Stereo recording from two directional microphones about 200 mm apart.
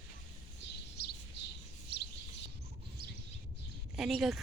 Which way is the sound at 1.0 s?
55° left (ahead or behind).